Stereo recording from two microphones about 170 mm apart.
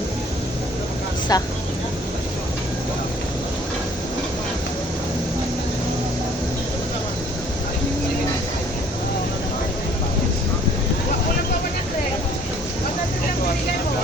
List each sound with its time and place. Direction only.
1.3 s speech: 20° left (ahead or behind)